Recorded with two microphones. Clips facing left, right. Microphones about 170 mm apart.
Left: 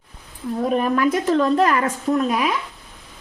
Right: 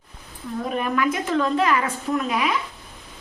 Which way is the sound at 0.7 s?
35° left (ahead or behind).